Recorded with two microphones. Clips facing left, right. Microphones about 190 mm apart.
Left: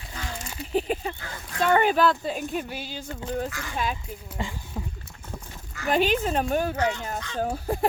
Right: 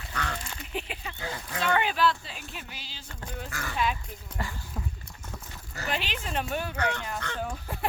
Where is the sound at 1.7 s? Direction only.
45° left (ahead or behind).